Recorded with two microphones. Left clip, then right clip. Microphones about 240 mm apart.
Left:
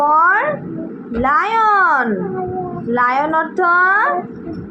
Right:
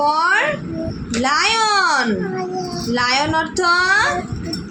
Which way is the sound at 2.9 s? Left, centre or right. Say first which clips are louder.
Left 3 dB; right.